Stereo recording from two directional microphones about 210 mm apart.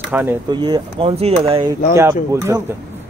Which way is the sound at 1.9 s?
15° right (ahead or behind).